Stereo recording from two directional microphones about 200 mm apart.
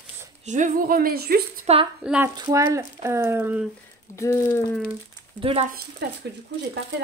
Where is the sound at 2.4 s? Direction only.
20° right (ahead or behind).